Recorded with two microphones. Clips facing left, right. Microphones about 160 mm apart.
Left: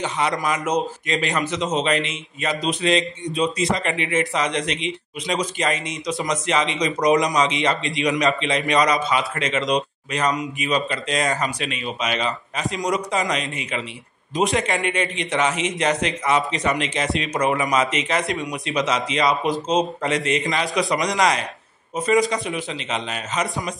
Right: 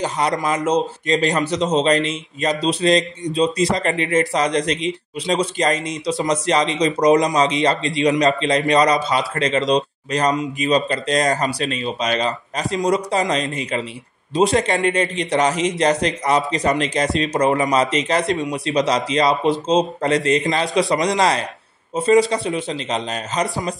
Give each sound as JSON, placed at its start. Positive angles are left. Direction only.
{"t": 0.0, "sound": "a man's voice", "side_deg": -40}